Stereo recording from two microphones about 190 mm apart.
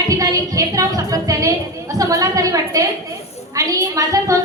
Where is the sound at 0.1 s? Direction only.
20° right (ahead or behind).